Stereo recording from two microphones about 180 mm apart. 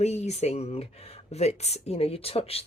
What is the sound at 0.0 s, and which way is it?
Speech, 40° left (ahead or behind).